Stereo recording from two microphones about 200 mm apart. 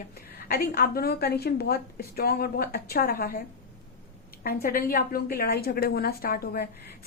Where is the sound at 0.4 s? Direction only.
50° left (ahead or behind).